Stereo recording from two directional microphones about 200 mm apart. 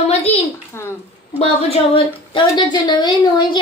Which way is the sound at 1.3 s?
30° left (ahead or behind).